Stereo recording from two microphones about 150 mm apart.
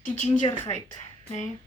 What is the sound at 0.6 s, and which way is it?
Speech, 50° left (ahead or behind).